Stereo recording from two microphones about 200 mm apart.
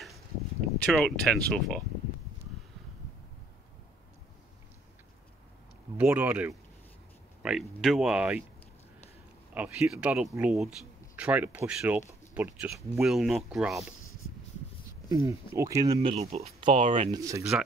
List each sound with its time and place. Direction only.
0.8 s speech: centre (ahead or behind)
5.9 s speech: 10° right (ahead or behind)
9.5 s speech: 5° right (ahead or behind)
12.9 s speech: centre (ahead or behind)
15.0 s speech: 15° right (ahead or behind); by 17.1 s 35° right (ahead or behind)
17.1 s speech: 15° right (ahead or behind)
17.4 s speech: 5° right (ahead or behind)